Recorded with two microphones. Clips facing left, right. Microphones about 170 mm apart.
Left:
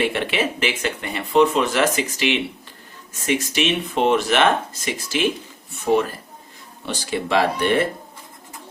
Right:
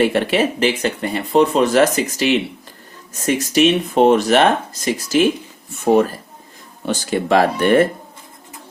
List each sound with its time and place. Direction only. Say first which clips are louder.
0.0 s speech: right 6 dB; 40° right (ahead or behind)